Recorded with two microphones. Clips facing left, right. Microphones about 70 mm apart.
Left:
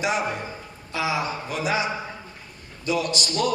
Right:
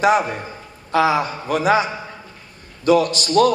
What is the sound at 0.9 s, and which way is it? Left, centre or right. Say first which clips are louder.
Speech: right 8 dB; right.